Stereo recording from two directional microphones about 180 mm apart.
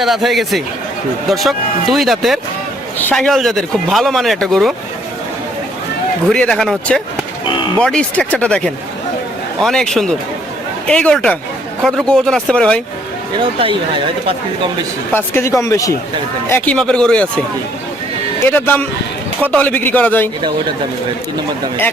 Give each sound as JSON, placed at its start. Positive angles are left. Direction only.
{"t": 0.0, "sound": "speech", "side_deg": 0}
{"t": 6.3, "sound": "speech", "side_deg": 5}
{"t": 15.1, "sound": "speech", "side_deg": 10}
{"t": 18.4, "sound": "speech", "side_deg": 10}